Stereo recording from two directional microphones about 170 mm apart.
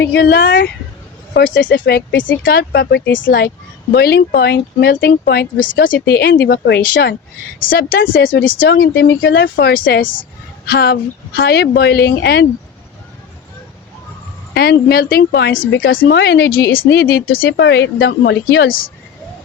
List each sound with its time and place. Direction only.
0.0 s speech: 70° left (ahead or behind); by 2.3 s 85° left
2.4 s speech: 65° left (ahead or behind); by 3.5 s 80° left
3.9 s speech: 70° left (ahead or behind); by 5.9 s 55° left (ahead or behind)
5.9 s speech: 70° left (ahead or behind)
7.6 s speech: 60° left (ahead or behind); by 8.4 s 75° left (ahead or behind)
8.6 s speech: 90° left
14.5 s speech: 70° left (ahead or behind); by 15.5 s 85° left
15.6 s speech: 75° left (ahead or behind)